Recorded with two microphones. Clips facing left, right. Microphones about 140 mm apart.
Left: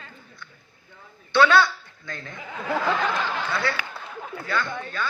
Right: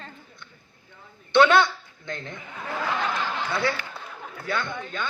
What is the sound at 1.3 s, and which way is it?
A woman's voice, 20° right (ahead or behind).